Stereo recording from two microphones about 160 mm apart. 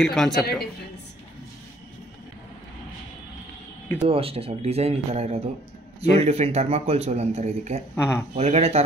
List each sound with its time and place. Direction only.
0.0 s a man's voice: 5° left (ahead or behind)
4.0 s a man's voice: 35° right (ahead or behind)
7.9 s speech: 15° left (ahead or behind)
8.4 s a man's voice: 40° right (ahead or behind)